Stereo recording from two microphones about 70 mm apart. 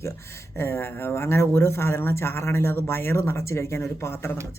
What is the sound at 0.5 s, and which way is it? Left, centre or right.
Speech, left.